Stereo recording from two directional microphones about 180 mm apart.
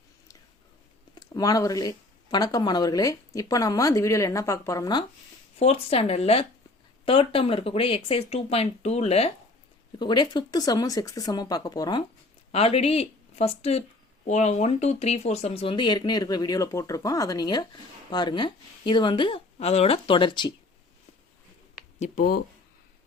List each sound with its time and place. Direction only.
1.1 s speech: 20° left (ahead or behind)
5.5 s speech: 35° left (ahead or behind)
12.5 s speech: 35° left (ahead or behind)
21.9 s speech: 40° left (ahead or behind)